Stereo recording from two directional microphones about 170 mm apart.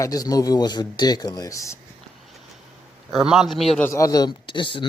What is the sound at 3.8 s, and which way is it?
Speech, 20° left (ahead or behind).